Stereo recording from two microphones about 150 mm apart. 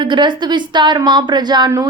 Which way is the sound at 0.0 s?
30° right (ahead or behind).